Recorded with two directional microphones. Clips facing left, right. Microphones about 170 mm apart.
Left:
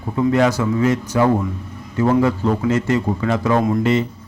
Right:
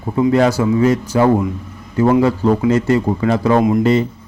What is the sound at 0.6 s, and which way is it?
Speech, 25° right (ahead or behind).